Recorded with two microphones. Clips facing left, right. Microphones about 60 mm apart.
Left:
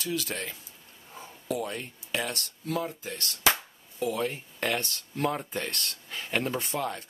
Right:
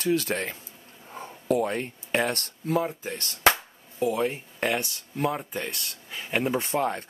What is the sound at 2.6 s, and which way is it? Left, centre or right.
Speech, right.